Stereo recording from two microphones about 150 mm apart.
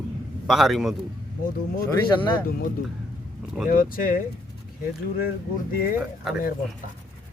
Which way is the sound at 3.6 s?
70° left (ahead or behind).